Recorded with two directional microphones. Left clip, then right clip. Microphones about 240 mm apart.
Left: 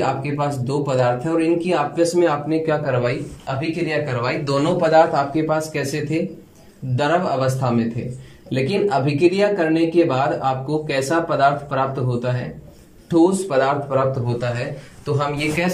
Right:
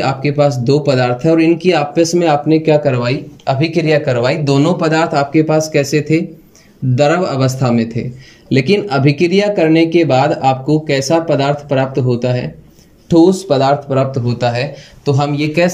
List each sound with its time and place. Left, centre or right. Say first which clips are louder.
0.2 s speech: right 10 dB; right